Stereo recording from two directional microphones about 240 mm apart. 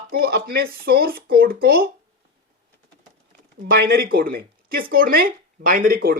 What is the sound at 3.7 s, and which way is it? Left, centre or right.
A woman's voice, right.